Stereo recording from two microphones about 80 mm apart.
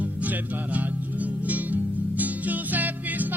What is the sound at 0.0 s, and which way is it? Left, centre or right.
Music, centre.